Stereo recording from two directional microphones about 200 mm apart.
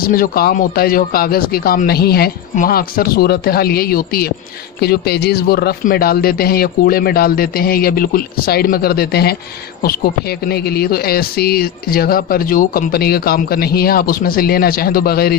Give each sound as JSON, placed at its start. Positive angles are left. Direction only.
{"t": 0.0, "sound": "speech", "side_deg": 45}
{"t": 10.5, "sound": "speech", "side_deg": 50}